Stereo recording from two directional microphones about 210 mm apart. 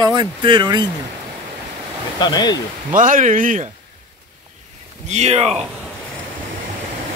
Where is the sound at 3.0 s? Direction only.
40° right (ahead or behind).